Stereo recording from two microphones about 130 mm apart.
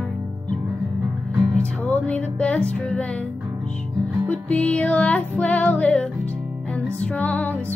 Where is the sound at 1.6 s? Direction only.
10° left (ahead or behind).